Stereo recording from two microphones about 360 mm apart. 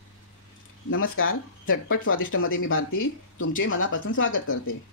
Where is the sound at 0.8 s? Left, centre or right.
Left.